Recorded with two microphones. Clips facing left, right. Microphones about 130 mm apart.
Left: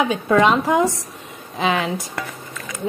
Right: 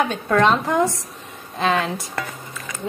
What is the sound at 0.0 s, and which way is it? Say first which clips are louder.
Speech: left 2 dB; 5° left (ahead or behind).